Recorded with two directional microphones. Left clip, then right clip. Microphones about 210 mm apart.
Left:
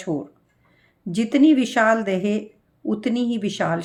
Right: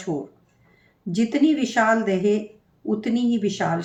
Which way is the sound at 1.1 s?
50° left (ahead or behind).